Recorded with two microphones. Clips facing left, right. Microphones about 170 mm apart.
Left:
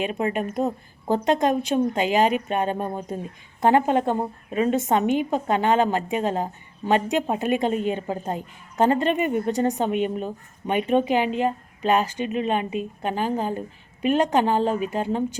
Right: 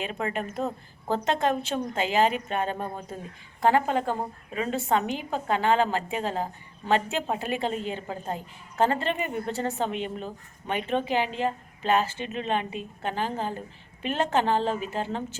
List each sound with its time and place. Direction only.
0.0 s a woman's voice: 15° left (ahead or behind)